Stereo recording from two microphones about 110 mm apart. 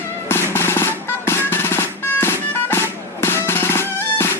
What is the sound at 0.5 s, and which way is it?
Music, 25° left (ahead or behind).